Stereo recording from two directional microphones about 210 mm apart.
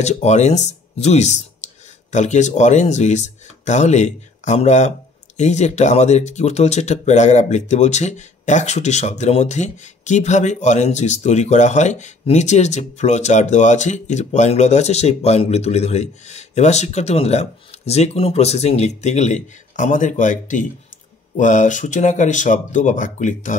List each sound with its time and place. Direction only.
0.0 s speech: 30° left (ahead or behind)